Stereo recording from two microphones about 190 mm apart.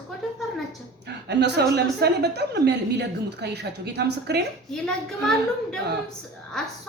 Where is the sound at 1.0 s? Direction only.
65° right (ahead or behind).